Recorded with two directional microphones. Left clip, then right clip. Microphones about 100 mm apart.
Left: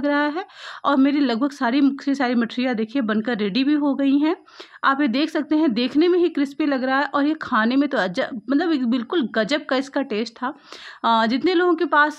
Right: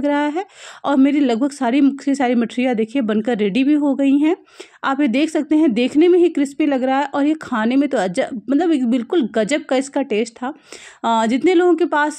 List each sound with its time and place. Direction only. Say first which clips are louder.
0.0 s speech: right 2 dB; 25° right (ahead or behind)